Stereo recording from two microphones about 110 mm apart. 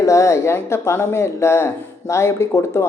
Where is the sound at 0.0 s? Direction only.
30° left (ahead or behind).